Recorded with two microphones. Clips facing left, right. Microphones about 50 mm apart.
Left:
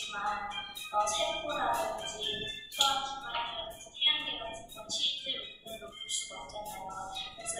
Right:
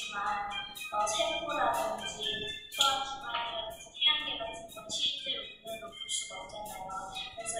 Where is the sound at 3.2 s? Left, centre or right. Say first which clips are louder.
Right 1 dB; centre.